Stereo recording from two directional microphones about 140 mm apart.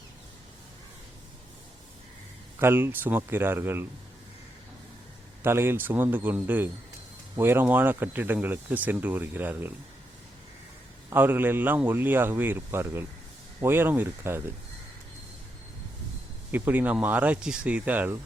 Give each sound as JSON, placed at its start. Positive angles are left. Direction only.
{"t": 2.6, "sound": "speech", "side_deg": -15}
{"t": 5.4, "sound": "speech", "side_deg": -15}
{"t": 11.1, "sound": "speech", "side_deg": -15}
{"t": 16.5, "sound": "speech", "side_deg": -15}